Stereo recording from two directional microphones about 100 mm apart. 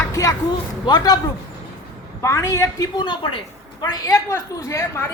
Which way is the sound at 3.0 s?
55° left (ahead or behind).